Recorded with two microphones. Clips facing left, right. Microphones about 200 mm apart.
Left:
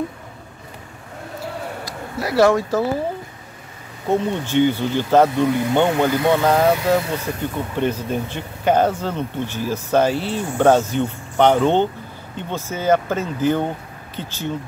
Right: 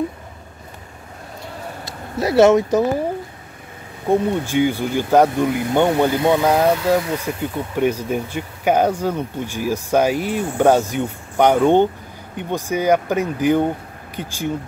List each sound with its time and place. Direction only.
1.9 s speech: 20° right (ahead or behind)
4.1 s speech: 10° right (ahead or behind)